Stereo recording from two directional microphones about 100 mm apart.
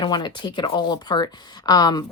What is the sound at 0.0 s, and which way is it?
Speech, 50° left (ahead or behind).